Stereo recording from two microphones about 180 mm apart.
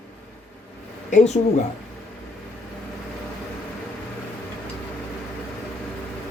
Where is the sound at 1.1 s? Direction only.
40° left (ahead or behind).